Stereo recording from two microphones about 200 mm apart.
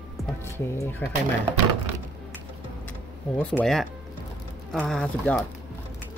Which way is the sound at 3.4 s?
5° left (ahead or behind).